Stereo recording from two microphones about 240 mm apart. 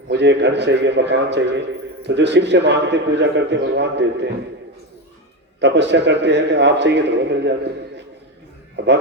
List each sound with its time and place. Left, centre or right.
0.1 s a man's voice: right
5.5 s a man's voice: right